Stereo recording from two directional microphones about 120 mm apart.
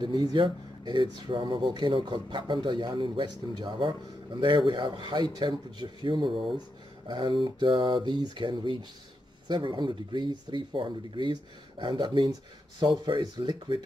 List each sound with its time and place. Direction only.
0.0 s speech: 35° right (ahead or behind)